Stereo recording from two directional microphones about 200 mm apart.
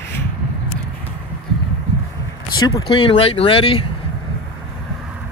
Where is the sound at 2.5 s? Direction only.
20° left (ahead or behind).